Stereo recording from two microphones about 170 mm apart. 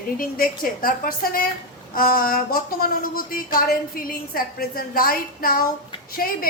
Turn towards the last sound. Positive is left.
turn(degrees=60)  # may be behind; listen again after turning